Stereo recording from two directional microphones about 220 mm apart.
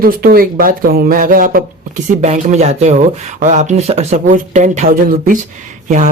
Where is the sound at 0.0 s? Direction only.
40° right (ahead or behind).